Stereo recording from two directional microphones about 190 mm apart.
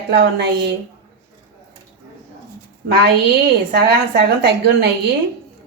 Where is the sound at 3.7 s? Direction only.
60° right (ahead or behind).